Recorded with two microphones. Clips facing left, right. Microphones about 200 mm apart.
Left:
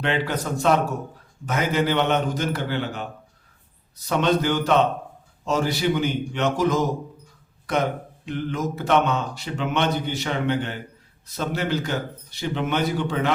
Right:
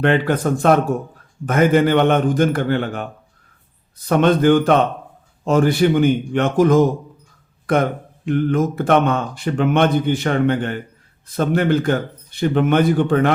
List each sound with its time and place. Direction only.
0.0 s speech: 50° right (ahead or behind)